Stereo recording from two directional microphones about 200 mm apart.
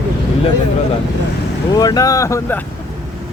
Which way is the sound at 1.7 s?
20° left (ahead or behind).